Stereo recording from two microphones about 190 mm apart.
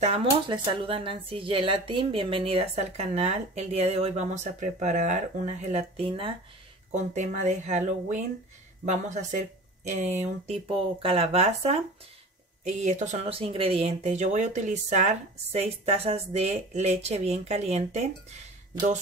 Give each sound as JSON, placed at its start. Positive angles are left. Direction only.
{"t": 0.0, "sound": "speech", "side_deg": -30}
{"t": 6.9, "sound": "speech", "side_deg": -40}